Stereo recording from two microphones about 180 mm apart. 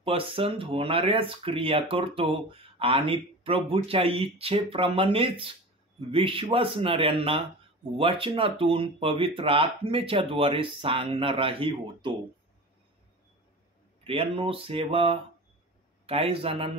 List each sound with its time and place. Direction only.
0.0 s speech: 30° right (ahead or behind)
14.0 s speech: 30° right (ahead or behind)